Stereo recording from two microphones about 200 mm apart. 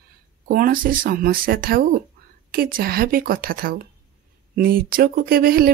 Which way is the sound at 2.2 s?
50° right (ahead or behind).